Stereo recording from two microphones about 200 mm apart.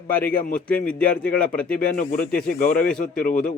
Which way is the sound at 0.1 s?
10° left (ahead or behind).